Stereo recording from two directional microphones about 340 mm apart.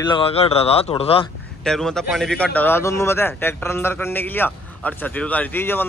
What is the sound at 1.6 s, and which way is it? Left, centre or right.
Speech, centre.